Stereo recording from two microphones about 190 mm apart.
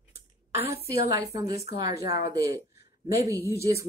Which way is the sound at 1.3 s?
20° right (ahead or behind).